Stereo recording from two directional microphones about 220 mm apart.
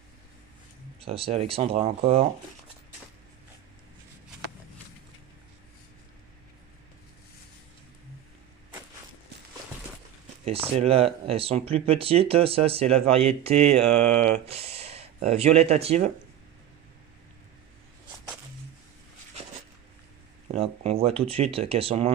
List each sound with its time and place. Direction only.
0.9 s speech: 25° right (ahead or behind)
10.8 s speech: 25° right (ahead or behind)
20.5 s speech: 30° right (ahead or behind)